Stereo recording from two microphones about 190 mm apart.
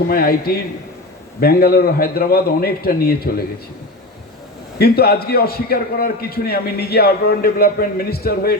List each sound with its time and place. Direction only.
0.1 s a man's voice: 50° left (ahead or behind)
4.8 s a man's voice: 55° left (ahead or behind)